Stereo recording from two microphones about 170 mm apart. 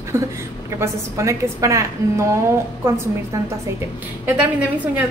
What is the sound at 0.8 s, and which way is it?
A woman's voice, 15° right (ahead or behind).